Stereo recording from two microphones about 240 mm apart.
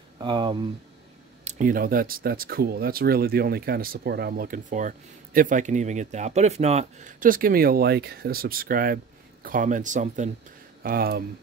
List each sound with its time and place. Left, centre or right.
0.2 s speech: centre
1.4 s speech: right